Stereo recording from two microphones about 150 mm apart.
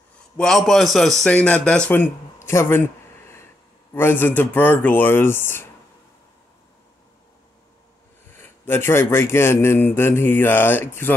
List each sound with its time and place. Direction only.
0.4 s a man's voice: centre (ahead or behind)
2.4 s a sound: 15° left (ahead or behind)
3.9 s a man's voice: 15° left (ahead or behind)
8.3 s a man's voice: 15° left (ahead or behind)